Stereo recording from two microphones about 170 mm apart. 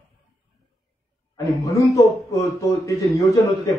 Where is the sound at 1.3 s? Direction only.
20° left (ahead or behind).